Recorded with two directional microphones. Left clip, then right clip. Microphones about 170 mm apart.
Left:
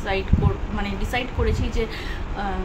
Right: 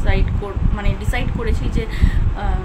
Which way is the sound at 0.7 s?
25° right (ahead or behind).